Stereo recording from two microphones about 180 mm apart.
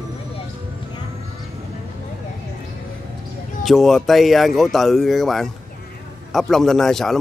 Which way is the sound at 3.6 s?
Centre (ahead or behind).